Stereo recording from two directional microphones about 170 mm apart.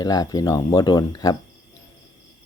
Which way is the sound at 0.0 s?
20° left (ahead or behind).